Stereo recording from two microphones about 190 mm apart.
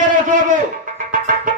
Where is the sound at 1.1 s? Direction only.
45° right (ahead or behind).